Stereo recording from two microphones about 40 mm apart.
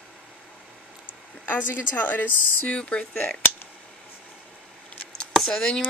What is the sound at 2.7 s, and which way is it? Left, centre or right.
Speech, left.